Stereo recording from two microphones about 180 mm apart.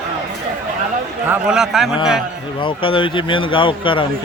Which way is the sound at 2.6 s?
30° left (ahead or behind).